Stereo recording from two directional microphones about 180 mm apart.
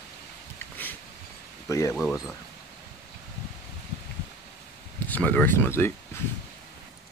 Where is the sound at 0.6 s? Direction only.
10° left (ahead or behind).